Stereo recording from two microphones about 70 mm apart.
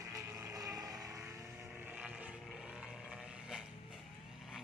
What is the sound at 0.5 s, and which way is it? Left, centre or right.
Vehicle, right.